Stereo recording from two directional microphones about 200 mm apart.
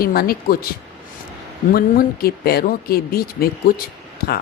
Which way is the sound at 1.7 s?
50° left (ahead or behind).